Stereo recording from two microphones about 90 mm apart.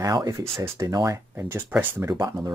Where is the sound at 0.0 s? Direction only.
40° right (ahead or behind).